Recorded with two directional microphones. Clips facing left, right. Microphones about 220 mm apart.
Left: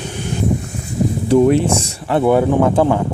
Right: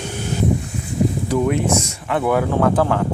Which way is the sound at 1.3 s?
30° left (ahead or behind).